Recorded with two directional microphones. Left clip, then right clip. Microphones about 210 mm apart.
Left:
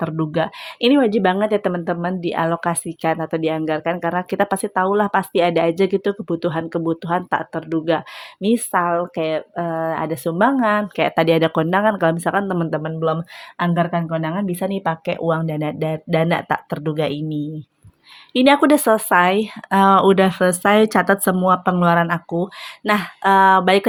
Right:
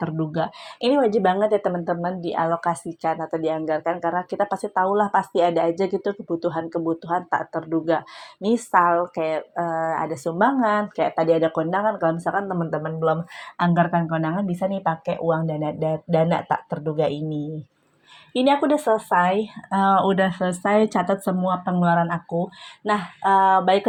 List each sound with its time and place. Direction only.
0.0 s a woman's voice: 40° left (ahead or behind)
13.6 s a woman's voice: 35° left (ahead or behind)
18.3 s a woman's voice: 35° left (ahead or behind)